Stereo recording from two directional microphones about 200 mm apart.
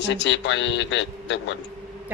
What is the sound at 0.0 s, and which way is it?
A man's voice, 60° left (ahead or behind).